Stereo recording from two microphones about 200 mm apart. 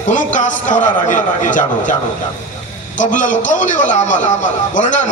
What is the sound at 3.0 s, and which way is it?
A man's voice, 40° left (ahead or behind).